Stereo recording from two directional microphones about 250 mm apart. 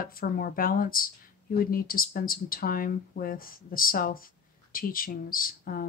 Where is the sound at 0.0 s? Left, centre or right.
Left.